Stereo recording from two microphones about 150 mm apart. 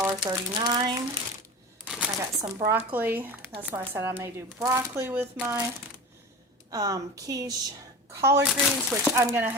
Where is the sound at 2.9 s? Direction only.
10° right (ahead or behind).